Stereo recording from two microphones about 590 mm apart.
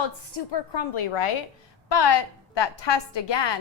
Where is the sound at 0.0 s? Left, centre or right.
Left.